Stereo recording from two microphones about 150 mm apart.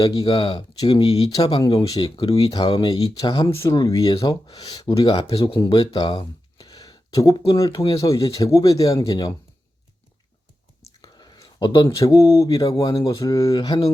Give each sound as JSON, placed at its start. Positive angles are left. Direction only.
{"t": 0.0, "sound": "speech", "side_deg": 25}
{"t": 0.3, "sound": "speech", "side_deg": 35}
{"t": 11.0, "sound": "speech", "side_deg": 25}